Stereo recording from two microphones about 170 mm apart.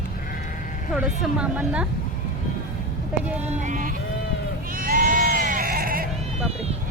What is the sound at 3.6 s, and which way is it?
Music, 50° right (ahead or behind).